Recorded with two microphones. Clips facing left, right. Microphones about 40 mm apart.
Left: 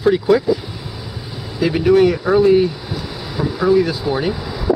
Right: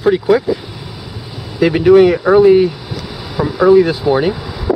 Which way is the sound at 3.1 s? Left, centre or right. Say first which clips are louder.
Right 5 dB; centre.